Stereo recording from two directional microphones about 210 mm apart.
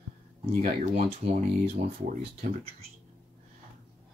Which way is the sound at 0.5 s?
45° right (ahead or behind).